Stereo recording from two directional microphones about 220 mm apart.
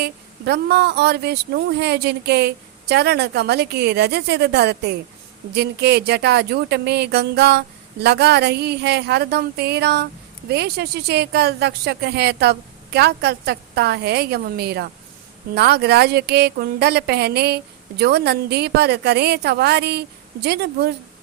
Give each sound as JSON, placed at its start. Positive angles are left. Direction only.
{"t": 0.0, "sound": "a woman's voice", "side_deg": -50}